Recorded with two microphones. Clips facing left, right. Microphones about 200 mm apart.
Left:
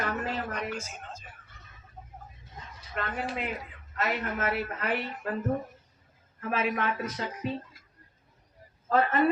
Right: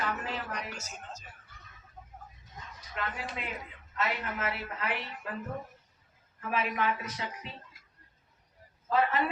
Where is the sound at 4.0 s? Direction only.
45° left (ahead or behind).